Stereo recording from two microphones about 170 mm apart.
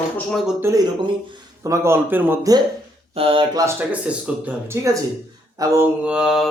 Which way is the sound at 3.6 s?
10° right (ahead or behind).